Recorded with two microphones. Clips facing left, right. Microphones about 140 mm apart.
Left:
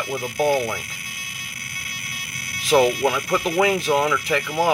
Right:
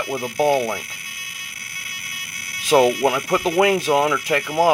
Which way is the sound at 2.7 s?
10° right (ahead or behind).